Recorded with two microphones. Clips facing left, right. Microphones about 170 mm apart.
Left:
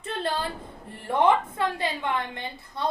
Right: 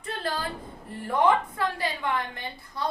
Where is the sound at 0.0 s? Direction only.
25° left (ahead or behind).